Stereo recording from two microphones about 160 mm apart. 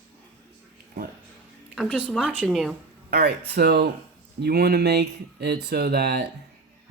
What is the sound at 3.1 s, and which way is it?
Speech, 75° right (ahead or behind).